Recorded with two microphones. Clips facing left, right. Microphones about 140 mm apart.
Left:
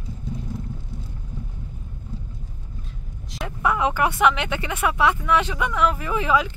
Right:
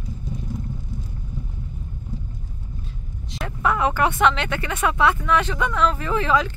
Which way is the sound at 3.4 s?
15° left (ahead or behind).